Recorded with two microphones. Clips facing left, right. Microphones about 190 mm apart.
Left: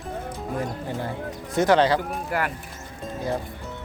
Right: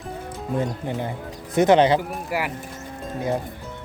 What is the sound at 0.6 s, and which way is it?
Speech, 20° right (ahead or behind).